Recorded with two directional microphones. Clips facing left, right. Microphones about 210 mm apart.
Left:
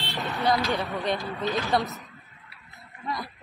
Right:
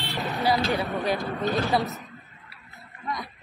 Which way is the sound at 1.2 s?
55° right (ahead or behind).